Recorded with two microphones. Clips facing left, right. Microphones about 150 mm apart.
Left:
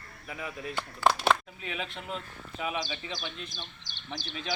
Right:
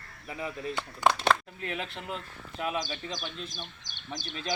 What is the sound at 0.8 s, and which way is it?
Speech, 5° left (ahead or behind).